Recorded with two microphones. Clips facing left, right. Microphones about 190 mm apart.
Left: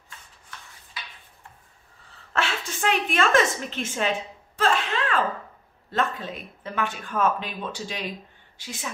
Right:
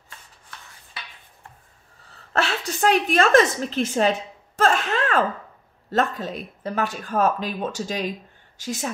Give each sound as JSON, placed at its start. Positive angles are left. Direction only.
{"t": 2.3, "sound": "speech", "side_deg": -40}
{"t": 4.6, "sound": "a sound", "side_deg": -45}
{"t": 5.9, "sound": "speech", "side_deg": -40}